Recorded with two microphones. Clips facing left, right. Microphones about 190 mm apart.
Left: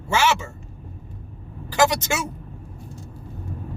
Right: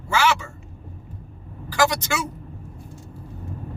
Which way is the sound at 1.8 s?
20° left (ahead or behind).